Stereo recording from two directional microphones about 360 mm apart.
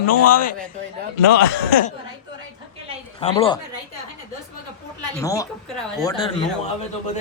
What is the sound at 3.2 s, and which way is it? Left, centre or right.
Speech, centre.